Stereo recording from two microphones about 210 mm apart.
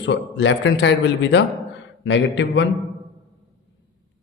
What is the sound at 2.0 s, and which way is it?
Speech, 60° left (ahead or behind).